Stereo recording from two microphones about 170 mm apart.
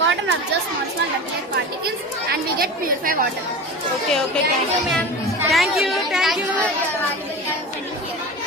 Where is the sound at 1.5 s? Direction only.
65° right (ahead or behind).